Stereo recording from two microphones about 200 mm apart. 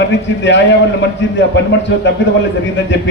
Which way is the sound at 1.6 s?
65° left (ahead or behind).